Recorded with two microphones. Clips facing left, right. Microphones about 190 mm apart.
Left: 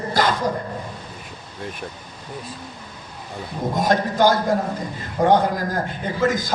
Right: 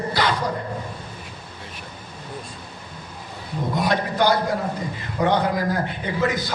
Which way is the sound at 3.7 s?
45° left (ahead or behind).